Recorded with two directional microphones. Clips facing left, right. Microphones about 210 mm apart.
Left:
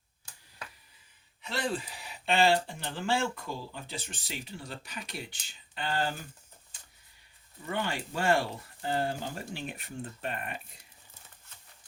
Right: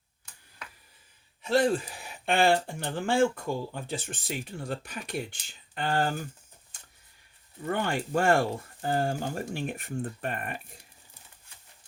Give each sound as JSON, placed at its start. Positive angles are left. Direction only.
{"t": 1.4, "sound": "speech", "side_deg": -45}
{"t": 7.7, "sound": "speech", "side_deg": -50}